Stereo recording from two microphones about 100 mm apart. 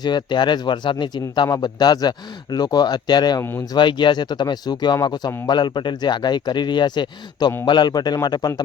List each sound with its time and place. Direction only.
0.0 s a man's voice: 50° left (ahead or behind)
1.5 s a man's voice: 40° left (ahead or behind)